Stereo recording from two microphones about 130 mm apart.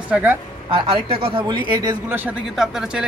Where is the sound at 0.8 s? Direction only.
50° right (ahead or behind).